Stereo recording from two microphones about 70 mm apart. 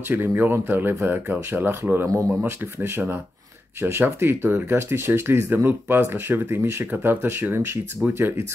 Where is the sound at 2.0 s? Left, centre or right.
Right.